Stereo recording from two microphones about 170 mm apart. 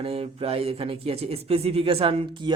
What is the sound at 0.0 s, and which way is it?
Speech, 35° right (ahead or behind).